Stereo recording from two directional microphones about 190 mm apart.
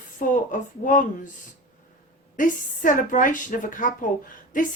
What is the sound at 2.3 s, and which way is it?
A woman's voice, 45° left (ahead or behind).